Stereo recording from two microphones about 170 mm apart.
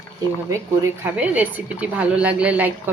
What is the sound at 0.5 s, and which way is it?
Speech, 15° right (ahead or behind).